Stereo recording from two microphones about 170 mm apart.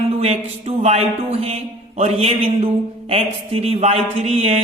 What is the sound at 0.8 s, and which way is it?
A man's voice, 40° right (ahead or behind).